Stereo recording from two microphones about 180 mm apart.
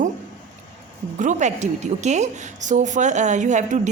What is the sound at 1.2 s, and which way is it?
A woman's voice, 40° right (ahead or behind).